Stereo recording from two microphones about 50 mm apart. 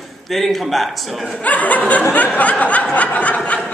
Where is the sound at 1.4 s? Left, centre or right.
Left.